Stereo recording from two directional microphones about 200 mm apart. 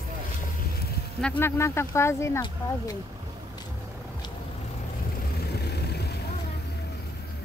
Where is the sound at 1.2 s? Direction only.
10° left (ahead or behind).